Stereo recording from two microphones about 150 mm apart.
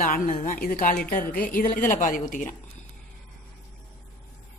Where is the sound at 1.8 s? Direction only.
55° left (ahead or behind).